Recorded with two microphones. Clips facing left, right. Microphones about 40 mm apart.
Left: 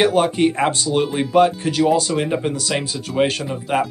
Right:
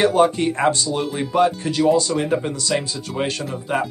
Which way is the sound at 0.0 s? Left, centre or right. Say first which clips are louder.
Even; left.